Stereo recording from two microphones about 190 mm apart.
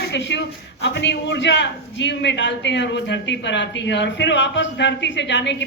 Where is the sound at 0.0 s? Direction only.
65° left (ahead or behind).